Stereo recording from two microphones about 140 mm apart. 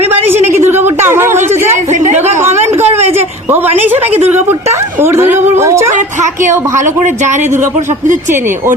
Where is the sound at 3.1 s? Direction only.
15° right (ahead or behind).